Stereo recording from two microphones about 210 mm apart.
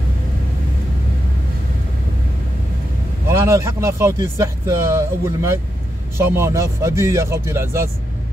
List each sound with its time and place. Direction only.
3.3 s a man's voice: 15° right (ahead or behind)